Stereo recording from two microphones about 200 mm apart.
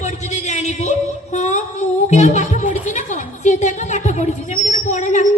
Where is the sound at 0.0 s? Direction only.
35° left (ahead or behind).